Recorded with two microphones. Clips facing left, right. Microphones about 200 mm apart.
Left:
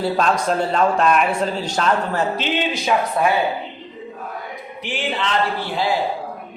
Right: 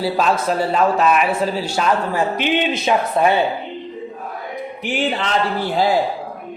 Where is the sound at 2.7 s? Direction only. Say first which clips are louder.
Right 2 dB; 25° right (ahead or behind).